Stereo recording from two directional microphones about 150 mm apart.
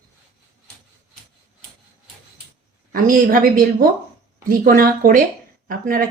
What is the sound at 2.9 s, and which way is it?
A woman's voice, 70° right (ahead or behind).